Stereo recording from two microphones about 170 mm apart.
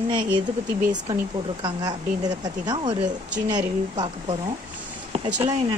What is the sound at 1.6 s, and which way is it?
A woman's voice, 25° right (ahead or behind).